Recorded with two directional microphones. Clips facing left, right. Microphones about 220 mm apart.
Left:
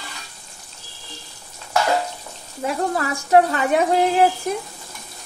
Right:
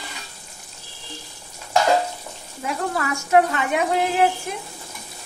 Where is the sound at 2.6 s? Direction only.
35° left (ahead or behind).